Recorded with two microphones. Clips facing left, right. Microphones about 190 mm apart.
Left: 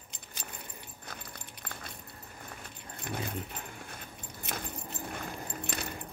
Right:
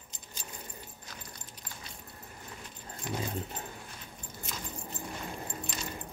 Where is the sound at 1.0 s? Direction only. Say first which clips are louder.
Left 2 dB; 60° left (ahead or behind).